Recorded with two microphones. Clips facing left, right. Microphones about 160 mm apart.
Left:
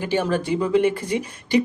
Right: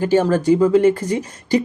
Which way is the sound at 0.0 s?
40° right (ahead or behind).